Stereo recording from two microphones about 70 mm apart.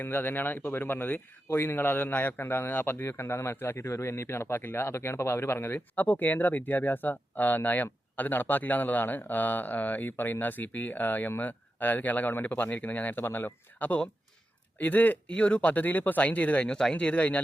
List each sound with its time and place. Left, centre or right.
0.0 s speech: left